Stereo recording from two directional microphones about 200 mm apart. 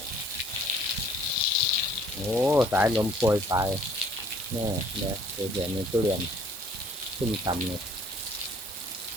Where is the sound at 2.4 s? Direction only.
10° right (ahead or behind).